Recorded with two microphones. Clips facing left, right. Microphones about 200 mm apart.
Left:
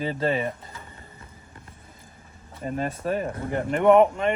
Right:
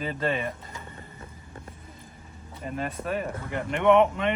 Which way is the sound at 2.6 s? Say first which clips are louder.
Left 4 dB; 35° left (ahead or behind).